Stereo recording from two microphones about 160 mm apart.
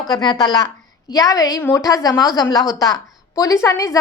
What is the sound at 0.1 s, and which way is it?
A woman's voice, 25° left (ahead or behind).